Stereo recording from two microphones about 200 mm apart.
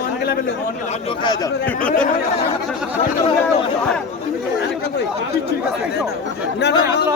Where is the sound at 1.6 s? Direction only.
5° left (ahead or behind).